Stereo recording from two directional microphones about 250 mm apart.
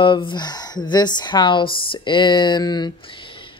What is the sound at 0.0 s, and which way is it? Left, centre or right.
Speech, centre.